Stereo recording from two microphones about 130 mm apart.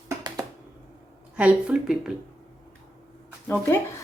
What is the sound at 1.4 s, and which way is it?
Speech, 10° right (ahead or behind).